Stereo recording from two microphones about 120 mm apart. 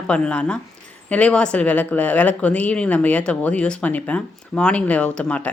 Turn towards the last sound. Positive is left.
turn(degrees=10)  # may be behind; listen again after turning